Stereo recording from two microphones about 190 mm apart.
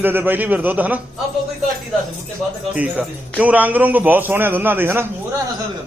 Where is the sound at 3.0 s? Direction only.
10° right (ahead or behind).